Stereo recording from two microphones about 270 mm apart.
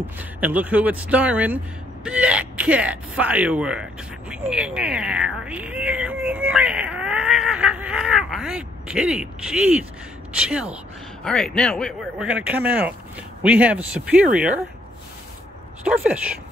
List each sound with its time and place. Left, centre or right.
0.0 s speech: centre
15.8 s speech: centre